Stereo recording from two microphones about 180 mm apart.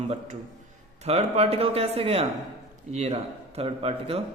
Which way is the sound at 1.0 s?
35° right (ahead or behind).